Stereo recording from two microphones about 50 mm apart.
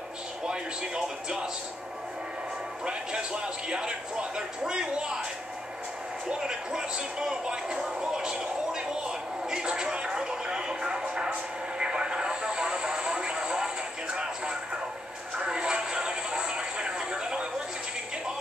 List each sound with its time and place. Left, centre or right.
0.5 s speech: centre
2.8 s speech: centre
6.2 s speech: centre
11.8 s vehicle: centre
14.1 s music: centre
15.3 s a sound: centre